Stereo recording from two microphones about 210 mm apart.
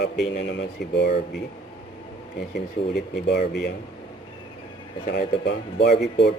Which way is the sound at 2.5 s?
50° left (ahead or behind).